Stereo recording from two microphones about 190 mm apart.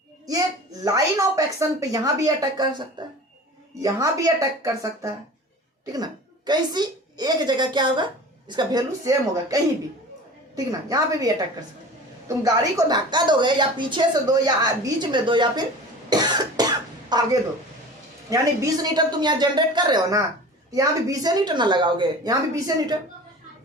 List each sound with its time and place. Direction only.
0.9 s a woman's voice: 15° right (ahead or behind)
16.0 s cough: 20° right (ahead or behind)
17.1 s a woman's voice: 20° right (ahead or behind)
18.3 s a woman's voice: 20° right (ahead or behind)